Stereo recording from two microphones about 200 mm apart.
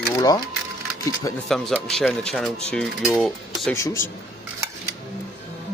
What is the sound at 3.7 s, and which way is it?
Speech, 15° left (ahead or behind).